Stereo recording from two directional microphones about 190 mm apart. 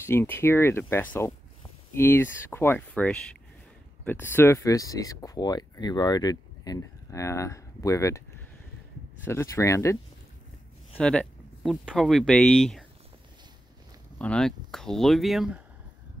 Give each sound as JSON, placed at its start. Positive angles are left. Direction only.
{"t": 0.0, "sound": "speech", "side_deg": 10}
{"t": 9.2, "sound": "speech", "side_deg": 15}
{"t": 11.0, "sound": "speech", "side_deg": 5}
{"t": 14.1, "sound": "speech", "side_deg": 5}